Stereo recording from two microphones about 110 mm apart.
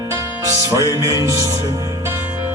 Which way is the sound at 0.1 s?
25° right (ahead or behind).